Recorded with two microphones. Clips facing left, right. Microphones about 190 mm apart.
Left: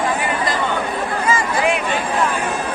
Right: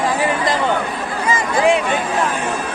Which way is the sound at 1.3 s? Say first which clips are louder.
Right 4 dB; 20° right (ahead or behind).